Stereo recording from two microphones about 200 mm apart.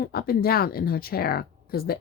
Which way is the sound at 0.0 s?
50° left (ahead or behind).